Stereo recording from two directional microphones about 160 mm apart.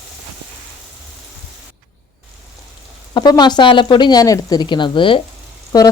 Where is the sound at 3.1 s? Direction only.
25° left (ahead or behind).